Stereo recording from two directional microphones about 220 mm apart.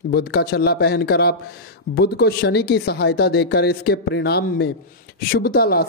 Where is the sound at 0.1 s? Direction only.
45° left (ahead or behind).